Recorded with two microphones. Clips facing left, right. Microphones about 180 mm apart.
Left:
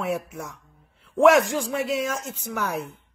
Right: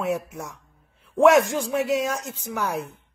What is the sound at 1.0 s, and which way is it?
A man's voice, 20° right (ahead or behind).